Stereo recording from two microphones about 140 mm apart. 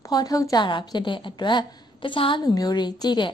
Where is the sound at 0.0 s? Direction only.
30° left (ahead or behind).